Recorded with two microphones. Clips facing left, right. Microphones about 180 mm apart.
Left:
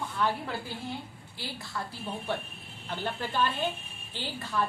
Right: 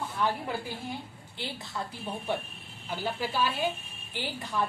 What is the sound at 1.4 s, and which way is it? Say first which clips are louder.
Speech: right 1 dB; 20° right (ahead or behind).